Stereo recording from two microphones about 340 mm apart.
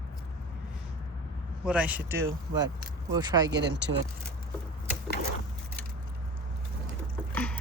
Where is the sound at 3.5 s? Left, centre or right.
Right.